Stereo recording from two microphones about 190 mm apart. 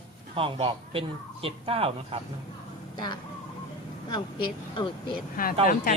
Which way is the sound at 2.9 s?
25° left (ahead or behind).